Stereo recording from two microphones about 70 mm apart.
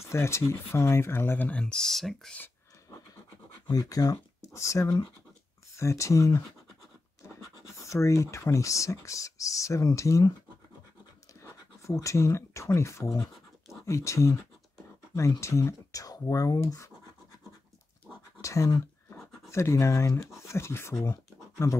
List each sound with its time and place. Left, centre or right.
0.0 s speech: left
1.5 s speech: centre
3.6 s speech: left
7.8 s speech: left
11.4 s speech: left
15.4 s speech: left
18.4 s a sound: left
19.5 s speech: left
20.9 s speech: left
21.6 s speech: left